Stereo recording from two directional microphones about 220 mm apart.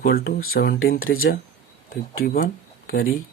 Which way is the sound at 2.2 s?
40° left (ahead or behind).